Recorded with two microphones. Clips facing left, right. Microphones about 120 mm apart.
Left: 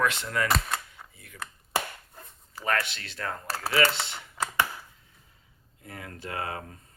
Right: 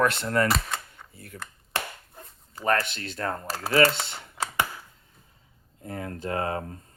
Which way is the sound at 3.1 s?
30° right (ahead or behind).